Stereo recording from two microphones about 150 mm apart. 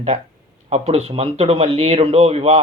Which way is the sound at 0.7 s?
45° right (ahead or behind).